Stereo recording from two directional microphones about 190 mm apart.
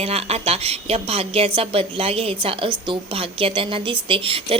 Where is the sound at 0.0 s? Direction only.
30° right (ahead or behind).